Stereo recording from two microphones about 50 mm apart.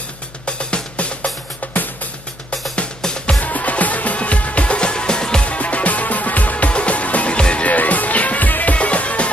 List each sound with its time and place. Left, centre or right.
0.5 s music: left
3.3 s music: left